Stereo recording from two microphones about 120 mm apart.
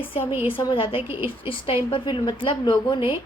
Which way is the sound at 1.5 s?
50° left (ahead or behind).